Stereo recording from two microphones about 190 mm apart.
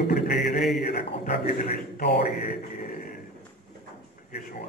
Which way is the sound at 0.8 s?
50° left (ahead or behind).